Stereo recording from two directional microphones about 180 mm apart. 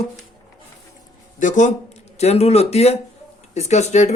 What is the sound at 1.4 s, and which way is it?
Speech, 45° left (ahead or behind).